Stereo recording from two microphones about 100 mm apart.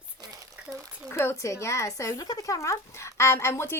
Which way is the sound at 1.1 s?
25° left (ahead or behind).